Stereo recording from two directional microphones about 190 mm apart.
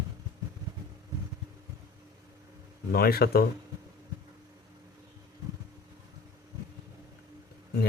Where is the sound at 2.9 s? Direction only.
55° left (ahead or behind).